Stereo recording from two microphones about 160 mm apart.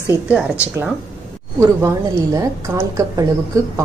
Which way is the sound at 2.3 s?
20° right (ahead or behind).